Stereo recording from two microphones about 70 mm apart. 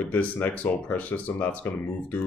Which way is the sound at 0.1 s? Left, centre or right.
Left.